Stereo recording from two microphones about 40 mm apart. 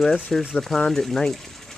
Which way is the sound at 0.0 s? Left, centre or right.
Centre.